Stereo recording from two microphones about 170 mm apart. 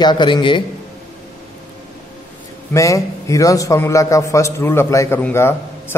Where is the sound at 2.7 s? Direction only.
20° left (ahead or behind).